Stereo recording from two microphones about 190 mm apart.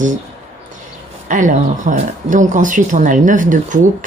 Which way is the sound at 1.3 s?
40° right (ahead or behind).